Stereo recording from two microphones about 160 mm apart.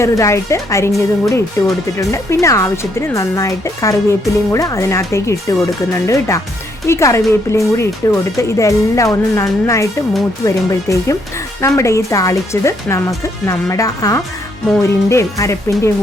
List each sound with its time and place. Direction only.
0.0 s speech: 15° left (ahead or behind)